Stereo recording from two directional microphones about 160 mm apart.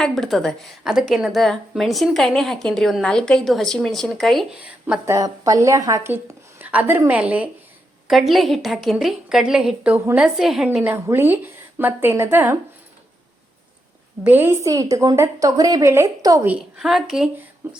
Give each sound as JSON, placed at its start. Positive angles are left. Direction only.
{"t": 0.0, "sound": "a woman's voice", "side_deg": 0}
{"t": 5.1, "sound": "a woman's voice", "side_deg": -20}
{"t": 14.3, "sound": "a woman's voice", "side_deg": -15}
{"t": 16.5, "sound": "a woman's voice", "side_deg": -5}